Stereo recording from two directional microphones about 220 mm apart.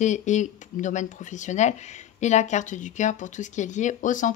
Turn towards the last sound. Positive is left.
turn(degrees=35)  # may be behind; listen again after turning